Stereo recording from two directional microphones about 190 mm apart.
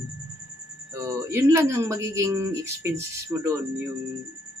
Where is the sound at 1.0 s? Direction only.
15° right (ahead or behind).